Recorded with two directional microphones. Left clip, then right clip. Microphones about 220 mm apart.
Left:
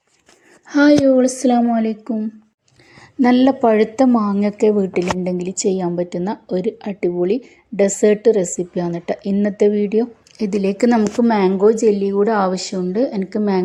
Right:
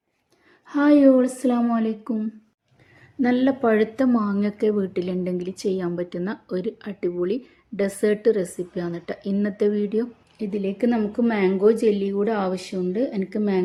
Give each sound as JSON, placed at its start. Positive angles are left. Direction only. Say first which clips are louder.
{"t": 0.7, "sound": "a woman's voice", "louder": "left 4 dB", "side_deg": 20}